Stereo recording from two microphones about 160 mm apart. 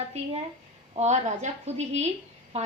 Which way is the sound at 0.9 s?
45° right (ahead or behind).